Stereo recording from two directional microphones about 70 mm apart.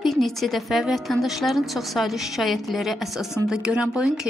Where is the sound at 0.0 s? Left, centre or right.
Centre.